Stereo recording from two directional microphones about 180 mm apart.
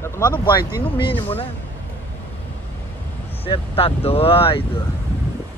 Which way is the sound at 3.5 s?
30° left (ahead or behind).